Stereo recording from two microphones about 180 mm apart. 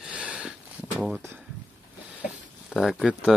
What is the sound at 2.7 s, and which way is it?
Speech, centre (ahead or behind).